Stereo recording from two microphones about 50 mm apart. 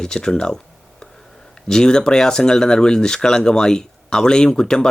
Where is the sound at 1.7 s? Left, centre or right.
Centre.